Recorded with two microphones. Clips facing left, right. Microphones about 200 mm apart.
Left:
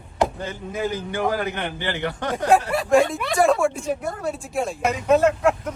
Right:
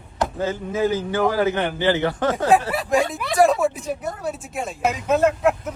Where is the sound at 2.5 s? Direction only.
Centre (ahead or behind).